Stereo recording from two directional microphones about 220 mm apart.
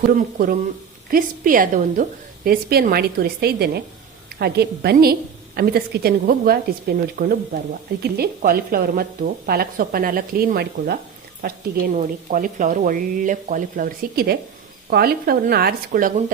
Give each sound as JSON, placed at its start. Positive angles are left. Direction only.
{"t": 1.1, "sound": "a woman's voice", "side_deg": -40}